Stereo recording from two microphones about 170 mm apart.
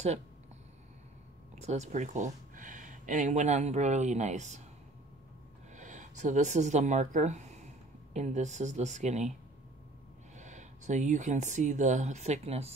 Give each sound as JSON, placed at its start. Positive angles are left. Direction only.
{"t": 1.6, "sound": "speech", "side_deg": -40}
{"t": 5.8, "sound": "speech", "side_deg": -45}
{"t": 10.3, "sound": "speech", "side_deg": -45}